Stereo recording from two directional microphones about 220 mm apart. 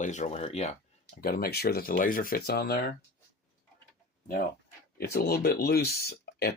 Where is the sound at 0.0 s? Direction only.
30° left (ahead or behind).